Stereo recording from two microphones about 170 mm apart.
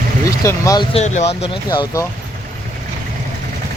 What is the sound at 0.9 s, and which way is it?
Speech, 45° left (ahead or behind).